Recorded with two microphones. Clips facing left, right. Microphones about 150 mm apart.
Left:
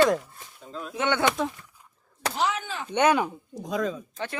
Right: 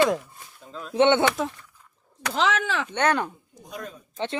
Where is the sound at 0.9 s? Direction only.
25° right (ahead or behind).